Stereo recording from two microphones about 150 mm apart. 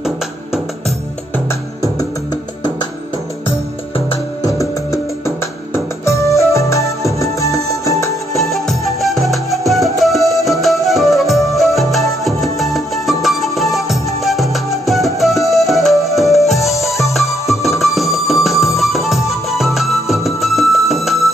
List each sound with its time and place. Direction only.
0.0 s music: 5° right (ahead or behind)
1.5 s music: 20° left (ahead or behind)
3.4 s music: 40° left (ahead or behind)
4.5 s music: 20° left (ahead or behind)
8.4 s music: centre (ahead or behind)